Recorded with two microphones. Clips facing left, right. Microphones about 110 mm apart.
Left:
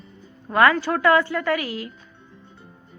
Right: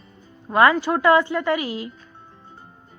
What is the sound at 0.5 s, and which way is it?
A woman's voice, 20° right (ahead or behind).